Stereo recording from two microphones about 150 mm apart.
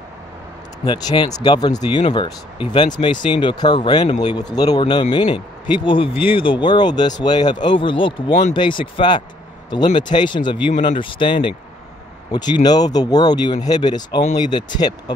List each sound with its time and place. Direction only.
0.8 s speech: 30° left (ahead or behind)